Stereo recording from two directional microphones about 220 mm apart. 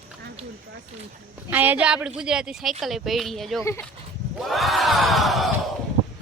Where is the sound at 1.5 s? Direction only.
10° right (ahead or behind).